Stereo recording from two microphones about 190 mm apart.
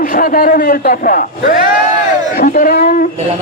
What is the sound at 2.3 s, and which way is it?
Speech, 45° left (ahead or behind).